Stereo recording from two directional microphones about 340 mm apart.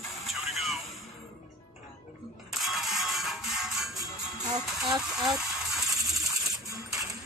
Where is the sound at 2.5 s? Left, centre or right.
Centre.